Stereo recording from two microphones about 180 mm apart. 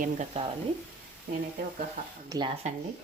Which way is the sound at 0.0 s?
40° right (ahead or behind).